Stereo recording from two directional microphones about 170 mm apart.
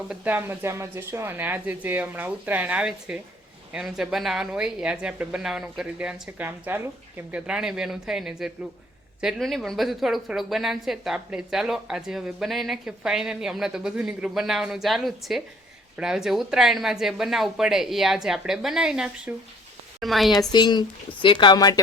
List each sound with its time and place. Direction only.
0.1 s a woman's voice: 10° right (ahead or behind)
20.5 s speech: 25° left (ahead or behind)